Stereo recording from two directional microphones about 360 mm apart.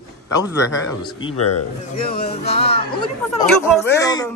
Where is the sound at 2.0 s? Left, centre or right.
Left.